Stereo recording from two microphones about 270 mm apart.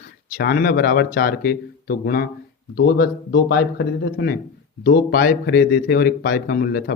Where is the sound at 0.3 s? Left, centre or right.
Left.